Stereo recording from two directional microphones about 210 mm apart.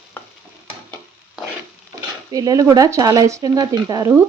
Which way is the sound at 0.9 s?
Centre (ahead or behind).